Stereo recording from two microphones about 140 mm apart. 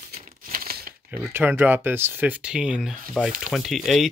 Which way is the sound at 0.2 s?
85° right.